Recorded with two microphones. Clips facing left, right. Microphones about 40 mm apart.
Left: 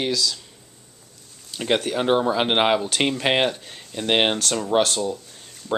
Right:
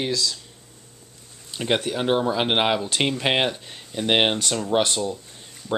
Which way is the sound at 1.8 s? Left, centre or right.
Centre.